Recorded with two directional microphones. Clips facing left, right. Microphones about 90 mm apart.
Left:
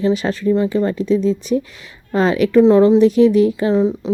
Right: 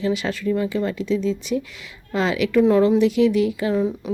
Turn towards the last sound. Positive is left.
turn(degrees=30)  # may be behind; listen again after turning